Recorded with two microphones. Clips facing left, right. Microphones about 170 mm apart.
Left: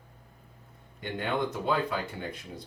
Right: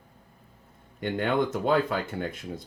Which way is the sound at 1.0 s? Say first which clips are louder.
Right 5 dB; 55° right (ahead or behind).